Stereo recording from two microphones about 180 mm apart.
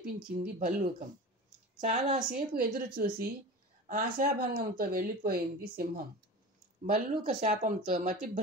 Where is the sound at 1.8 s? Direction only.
40° right (ahead or behind).